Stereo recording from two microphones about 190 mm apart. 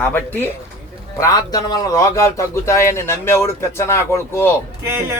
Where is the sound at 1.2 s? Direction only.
20° left (ahead or behind).